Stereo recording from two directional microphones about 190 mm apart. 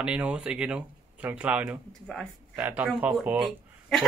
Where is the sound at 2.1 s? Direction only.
5° left (ahead or behind).